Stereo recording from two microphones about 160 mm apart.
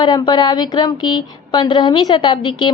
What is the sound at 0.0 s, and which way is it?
A woman's voice, 25° left (ahead or behind).